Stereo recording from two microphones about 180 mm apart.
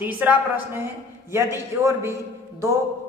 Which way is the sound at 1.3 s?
15° right (ahead or behind).